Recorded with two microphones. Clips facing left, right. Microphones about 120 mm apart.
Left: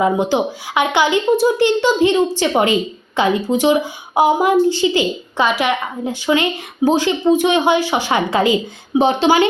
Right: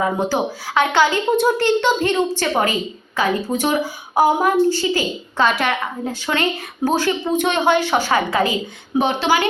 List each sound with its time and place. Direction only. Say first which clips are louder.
0.0 s a woman's voice: left 4 dB; 20° left (ahead or behind)